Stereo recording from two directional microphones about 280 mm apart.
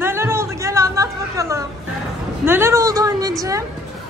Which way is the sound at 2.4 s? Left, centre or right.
Centre.